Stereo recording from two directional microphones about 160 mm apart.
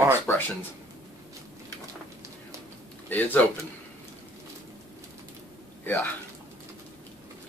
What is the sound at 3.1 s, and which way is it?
Speech, 10° left (ahead or behind).